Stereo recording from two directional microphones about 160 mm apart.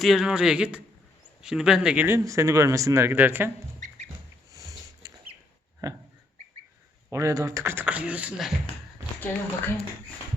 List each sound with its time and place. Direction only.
0.0 s a man's voice: centre (ahead or behind)
2.0 s speech: 15° right (ahead or behind)
3.8 s rodents: 50° right (ahead or behind)
5.0 s a sound: 20° right (ahead or behind)
7.1 s speech: 20° right (ahead or behind)
9.2 s speech: 10° left (ahead or behind)